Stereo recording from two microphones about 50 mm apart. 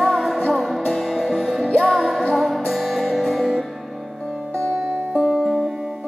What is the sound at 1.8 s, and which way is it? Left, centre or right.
Music, centre.